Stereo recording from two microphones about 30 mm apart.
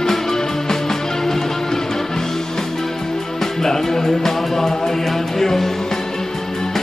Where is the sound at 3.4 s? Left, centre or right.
Centre.